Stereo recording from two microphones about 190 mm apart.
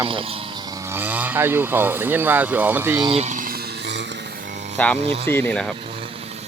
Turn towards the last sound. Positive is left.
turn(degrees=5)  # may be behind; listen again after turning